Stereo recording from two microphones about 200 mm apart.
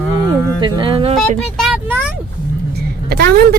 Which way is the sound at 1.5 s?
5° right (ahead or behind).